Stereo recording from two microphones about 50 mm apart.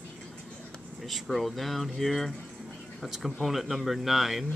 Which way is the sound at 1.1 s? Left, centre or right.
Centre.